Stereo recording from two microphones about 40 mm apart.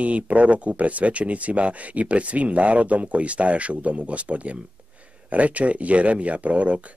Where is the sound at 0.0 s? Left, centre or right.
Right.